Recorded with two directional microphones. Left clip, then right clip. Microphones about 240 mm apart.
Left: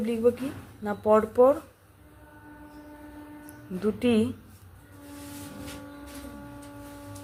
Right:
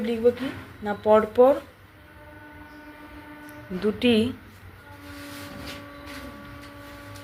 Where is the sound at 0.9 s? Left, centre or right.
Centre.